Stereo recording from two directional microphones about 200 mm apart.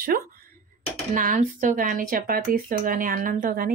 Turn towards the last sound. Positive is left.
turn(degrees=-45)  # may be behind; listen again after turning